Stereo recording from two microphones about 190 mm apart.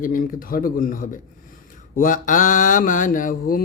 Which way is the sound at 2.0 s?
45° left (ahead or behind).